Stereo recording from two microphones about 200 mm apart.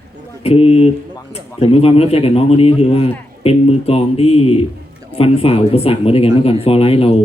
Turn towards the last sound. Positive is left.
turn(degrees=30)  # may be behind; listen again after turning